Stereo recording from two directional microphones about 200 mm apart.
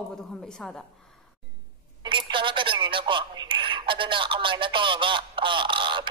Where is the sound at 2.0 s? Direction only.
25° right (ahead or behind).